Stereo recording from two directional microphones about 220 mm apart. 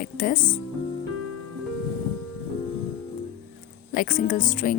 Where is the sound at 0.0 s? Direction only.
40° left (ahead or behind).